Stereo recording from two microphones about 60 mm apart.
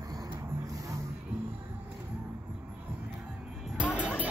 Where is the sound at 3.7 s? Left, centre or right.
Centre.